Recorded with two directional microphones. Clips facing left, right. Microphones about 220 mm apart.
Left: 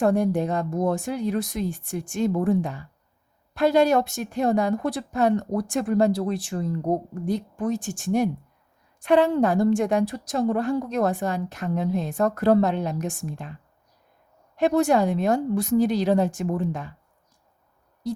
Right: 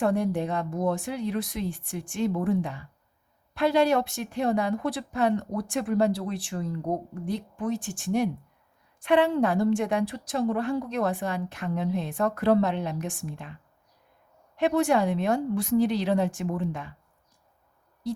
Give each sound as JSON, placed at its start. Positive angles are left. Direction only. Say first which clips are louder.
{"t": 0.0, "sound": "a woman's voice", "louder": "left 4 dB", "side_deg": 45}